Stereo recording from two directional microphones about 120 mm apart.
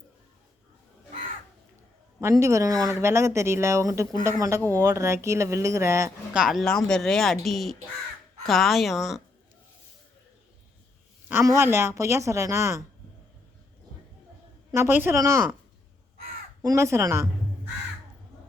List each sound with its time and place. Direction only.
2.2 s speech: 25° right (ahead or behind)
6.3 s speech: 5° right (ahead or behind)
11.4 s speech: 20° right (ahead or behind)
14.7 s speech: 20° right (ahead or behind)
16.6 s speech: 25° right (ahead or behind)